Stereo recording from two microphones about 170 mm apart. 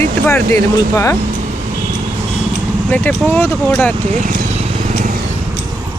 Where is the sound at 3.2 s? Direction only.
15° left (ahead or behind).